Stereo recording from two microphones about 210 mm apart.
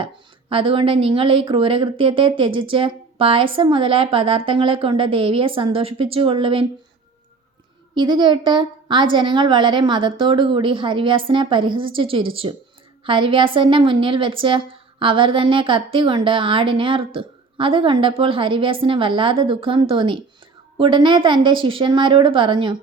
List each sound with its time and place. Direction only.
0.5 s speech: 25° right (ahead or behind)
7.9 s speech: 20° right (ahead or behind)